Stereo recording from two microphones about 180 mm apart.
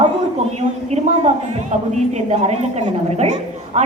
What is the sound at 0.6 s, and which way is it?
A woman's voice, 40° right (ahead or behind).